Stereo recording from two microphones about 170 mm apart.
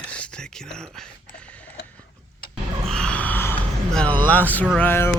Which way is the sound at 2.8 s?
5° left (ahead or behind).